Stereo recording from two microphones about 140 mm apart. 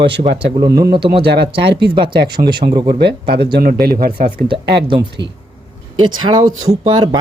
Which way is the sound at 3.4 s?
90° right.